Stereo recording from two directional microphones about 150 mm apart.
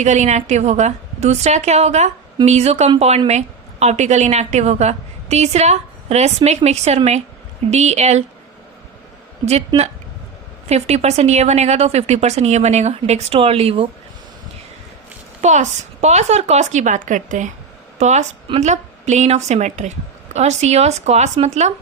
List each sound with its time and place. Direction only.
0.0 s a woman's voice: 50° right (ahead or behind)
9.5 s speech: 45° right (ahead or behind)
15.4 s a woman's voice: 50° right (ahead or behind)